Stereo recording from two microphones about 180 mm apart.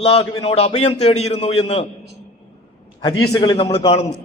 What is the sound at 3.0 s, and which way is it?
Speech, 20° left (ahead or behind).